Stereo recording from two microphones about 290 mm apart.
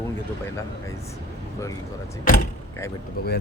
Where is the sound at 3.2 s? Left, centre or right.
Left.